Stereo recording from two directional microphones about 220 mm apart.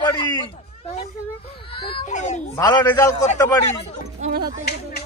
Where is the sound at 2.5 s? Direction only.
20° left (ahead or behind).